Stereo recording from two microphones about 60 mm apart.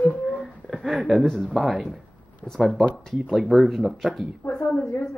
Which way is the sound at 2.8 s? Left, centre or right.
Centre.